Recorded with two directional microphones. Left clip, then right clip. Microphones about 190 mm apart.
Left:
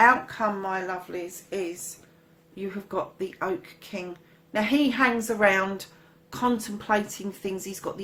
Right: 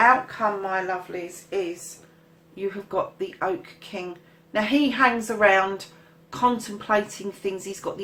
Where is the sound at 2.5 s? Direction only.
35° left (ahead or behind).